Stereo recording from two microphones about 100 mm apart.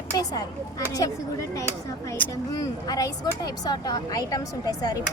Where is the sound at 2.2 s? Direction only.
15° left (ahead or behind).